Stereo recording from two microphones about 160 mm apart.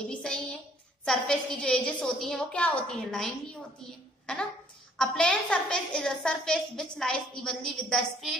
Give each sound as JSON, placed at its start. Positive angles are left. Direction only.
{"t": 0.1, "sound": "a sound", "side_deg": 5}
{"t": 1.0, "sound": "a woman's voice", "side_deg": 5}
{"t": 4.9, "sound": "a woman's voice", "side_deg": 5}